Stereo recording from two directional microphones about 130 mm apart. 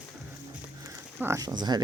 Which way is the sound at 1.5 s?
35° right (ahead or behind).